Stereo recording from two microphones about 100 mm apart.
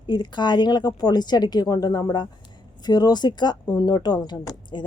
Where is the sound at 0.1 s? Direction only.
50° left (ahead or behind).